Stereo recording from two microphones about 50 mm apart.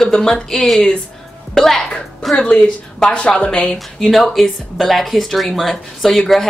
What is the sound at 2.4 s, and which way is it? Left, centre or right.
A woman's voice, centre.